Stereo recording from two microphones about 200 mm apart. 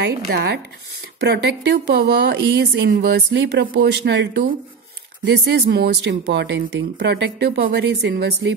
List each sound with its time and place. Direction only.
1.2 s speech: 60° right (ahead or behind)